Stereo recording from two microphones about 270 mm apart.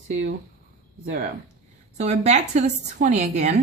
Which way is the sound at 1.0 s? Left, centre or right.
Right.